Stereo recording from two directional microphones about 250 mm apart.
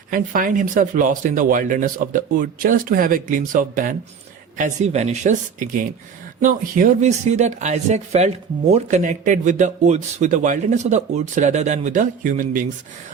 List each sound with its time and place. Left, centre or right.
0.1 s speech: right